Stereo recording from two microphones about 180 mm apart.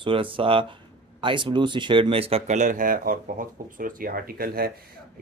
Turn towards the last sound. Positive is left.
turn(degrees=-55)  # may be behind; listen again after turning